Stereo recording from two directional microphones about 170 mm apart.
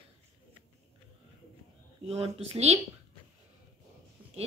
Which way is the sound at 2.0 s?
35° right (ahead or behind).